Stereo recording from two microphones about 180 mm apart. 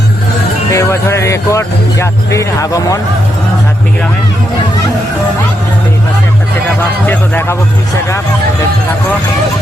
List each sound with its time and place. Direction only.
0.7 s speech: 15° left (ahead or behind)
7.1 s speech: 10° left (ahead or behind)